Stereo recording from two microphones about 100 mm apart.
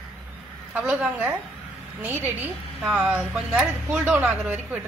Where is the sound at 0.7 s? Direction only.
15° right (ahead or behind).